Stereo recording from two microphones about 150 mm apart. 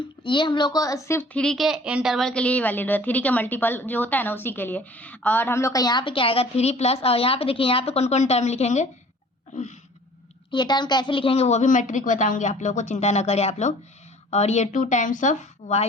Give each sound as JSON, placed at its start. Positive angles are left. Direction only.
{"t": 0.3, "sound": "a woman's voice", "side_deg": 30}
{"t": 10.5, "sound": "a woman's voice", "side_deg": 30}